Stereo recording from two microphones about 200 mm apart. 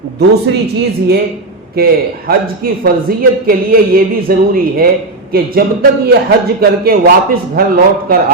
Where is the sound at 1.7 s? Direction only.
50° right (ahead or behind).